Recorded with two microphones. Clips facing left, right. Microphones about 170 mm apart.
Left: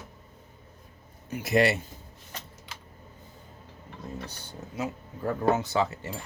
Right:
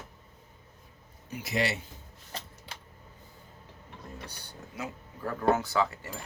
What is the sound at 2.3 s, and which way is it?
Vehicle, 30° right (ahead or behind).